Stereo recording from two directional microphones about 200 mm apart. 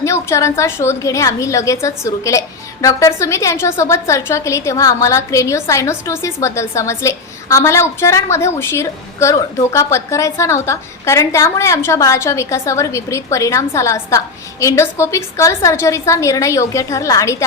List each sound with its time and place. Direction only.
0.0 s a woman's voice: 15° left (ahead or behind)